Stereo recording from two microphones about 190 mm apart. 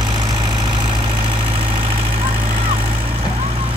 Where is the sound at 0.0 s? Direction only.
25° right (ahead or behind).